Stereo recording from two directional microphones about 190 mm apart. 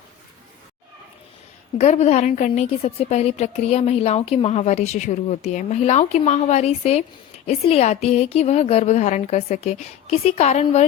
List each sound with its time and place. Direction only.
1.8 s a woman's voice: 35° left (ahead or behind)